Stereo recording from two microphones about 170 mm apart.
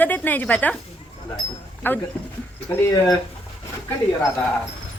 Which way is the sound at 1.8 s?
10° left (ahead or behind).